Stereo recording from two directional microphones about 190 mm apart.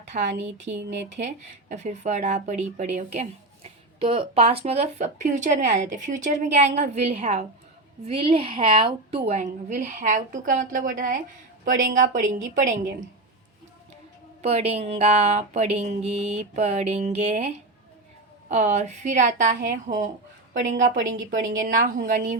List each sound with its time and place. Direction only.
0.1 s a woman's voice: 45° right (ahead or behind)
1.7 s a woman's voice: 35° right (ahead or behind)
9.3 s a woman's voice: 40° right (ahead or behind)
14.4 s a woman's voice: 35° right (ahead or behind)